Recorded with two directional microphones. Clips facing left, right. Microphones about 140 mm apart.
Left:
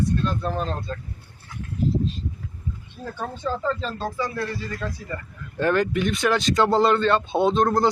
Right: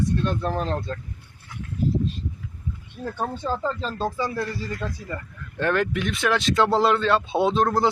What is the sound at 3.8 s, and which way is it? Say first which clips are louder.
Speech: right 1 dB; 30° right (ahead or behind).